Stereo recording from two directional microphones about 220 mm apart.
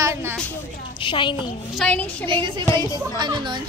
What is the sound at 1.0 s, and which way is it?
Speech, 20° left (ahead or behind).